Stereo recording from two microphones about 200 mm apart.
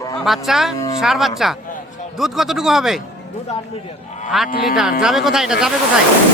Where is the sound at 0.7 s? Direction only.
20° left (ahead or behind).